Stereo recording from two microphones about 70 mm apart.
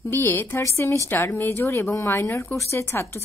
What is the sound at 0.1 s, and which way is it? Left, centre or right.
A woman's voice, left.